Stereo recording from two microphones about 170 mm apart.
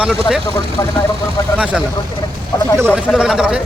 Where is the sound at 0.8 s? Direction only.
20° left (ahead or behind).